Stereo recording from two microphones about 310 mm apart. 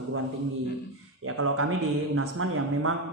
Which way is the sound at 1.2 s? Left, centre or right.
Right.